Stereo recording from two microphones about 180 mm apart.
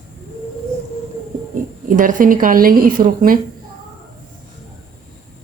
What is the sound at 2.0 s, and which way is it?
A woman's voice, 45° right (ahead or behind).